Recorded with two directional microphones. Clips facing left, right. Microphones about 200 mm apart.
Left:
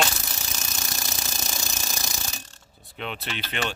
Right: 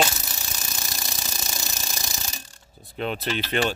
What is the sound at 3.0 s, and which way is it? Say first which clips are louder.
Speech: right 6 dB; 40° right (ahead or behind).